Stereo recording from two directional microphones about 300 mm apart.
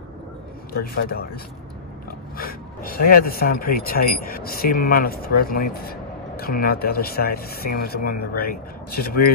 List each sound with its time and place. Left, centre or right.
0.9 s speech: left